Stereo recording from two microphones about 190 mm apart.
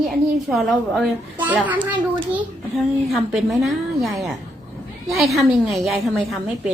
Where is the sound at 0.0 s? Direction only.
Centre (ahead or behind).